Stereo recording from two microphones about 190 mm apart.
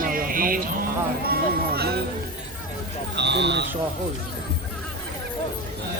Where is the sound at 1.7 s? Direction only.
55° right (ahead or behind).